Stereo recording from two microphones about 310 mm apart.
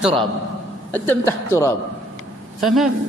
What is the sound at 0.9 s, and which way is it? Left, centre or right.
A woman's voice, centre.